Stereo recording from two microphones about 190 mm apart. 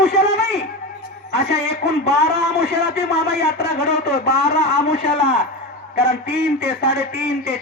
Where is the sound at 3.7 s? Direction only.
55° left (ahead or behind).